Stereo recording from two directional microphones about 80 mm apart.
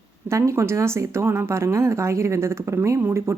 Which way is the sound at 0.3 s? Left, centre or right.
Right.